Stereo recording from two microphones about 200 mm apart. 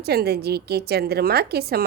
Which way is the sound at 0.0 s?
55° right (ahead or behind).